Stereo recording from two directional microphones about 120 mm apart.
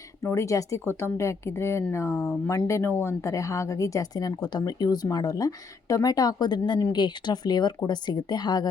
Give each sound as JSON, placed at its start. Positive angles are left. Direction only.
{"t": 0.2, "sound": "a woman's voice", "side_deg": 25}